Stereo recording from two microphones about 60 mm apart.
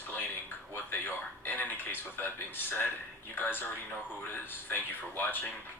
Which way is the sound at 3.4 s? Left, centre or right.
Left.